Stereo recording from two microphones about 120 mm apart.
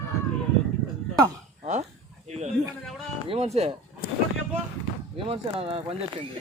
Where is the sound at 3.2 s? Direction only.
60° right (ahead or behind).